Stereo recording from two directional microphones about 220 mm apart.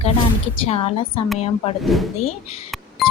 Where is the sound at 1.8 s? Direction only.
Centre (ahead or behind).